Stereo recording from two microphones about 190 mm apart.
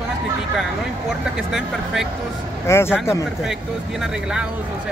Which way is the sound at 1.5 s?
Centre (ahead or behind).